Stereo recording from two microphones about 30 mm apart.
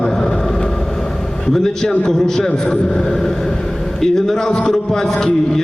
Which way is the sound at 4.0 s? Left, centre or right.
Centre.